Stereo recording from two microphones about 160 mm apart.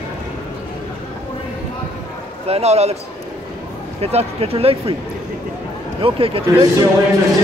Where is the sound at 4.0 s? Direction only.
40° right (ahead or behind).